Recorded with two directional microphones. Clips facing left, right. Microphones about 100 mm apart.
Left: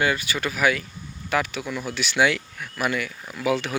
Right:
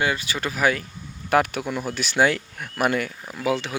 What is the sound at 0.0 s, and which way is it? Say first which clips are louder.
Speech: left 1 dB; 30° right (ahead or behind).